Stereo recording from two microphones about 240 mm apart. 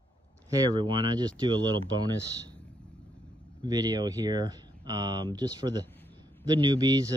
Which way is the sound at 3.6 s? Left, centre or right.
Centre.